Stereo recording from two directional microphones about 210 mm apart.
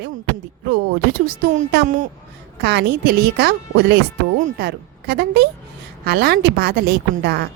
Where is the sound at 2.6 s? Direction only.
55° right (ahead or behind).